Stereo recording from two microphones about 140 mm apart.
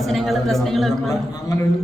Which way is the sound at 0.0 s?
Centre (ahead or behind).